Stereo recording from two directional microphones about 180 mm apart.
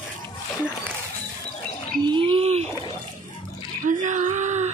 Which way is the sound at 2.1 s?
30° right (ahead or behind).